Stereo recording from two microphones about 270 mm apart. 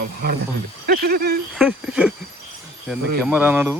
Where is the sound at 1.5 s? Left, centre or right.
Centre.